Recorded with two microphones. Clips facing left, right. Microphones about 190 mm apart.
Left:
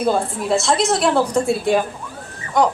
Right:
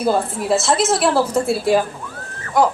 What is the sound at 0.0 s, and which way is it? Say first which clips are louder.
A woman's voice: even; 5° right (ahead or behind).